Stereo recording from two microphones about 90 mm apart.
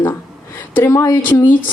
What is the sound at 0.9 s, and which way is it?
Speech, 35° left (ahead or behind).